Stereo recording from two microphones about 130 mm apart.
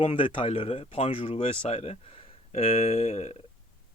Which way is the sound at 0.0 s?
45° left (ahead or behind).